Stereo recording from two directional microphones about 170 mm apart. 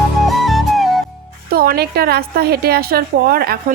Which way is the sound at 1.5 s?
65° right (ahead or behind).